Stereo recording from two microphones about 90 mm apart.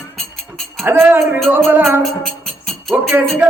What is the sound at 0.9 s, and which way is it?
Speech, 20° right (ahead or behind).